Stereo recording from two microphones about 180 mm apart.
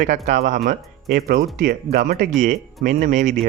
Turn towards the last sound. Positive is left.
turn(degrees=-45)  # may be behind; listen again after turning